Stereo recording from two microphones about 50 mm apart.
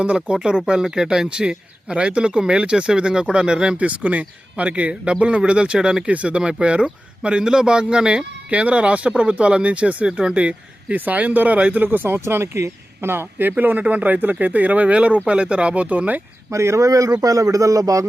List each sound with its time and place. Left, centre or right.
0.0 s a man's voice: right
3.8 s a man's voice: right
6.1 s speech: right
10.9 s speech: right
13.1 s speech: right
13.6 s speech: right
16.5 s a man's voice: right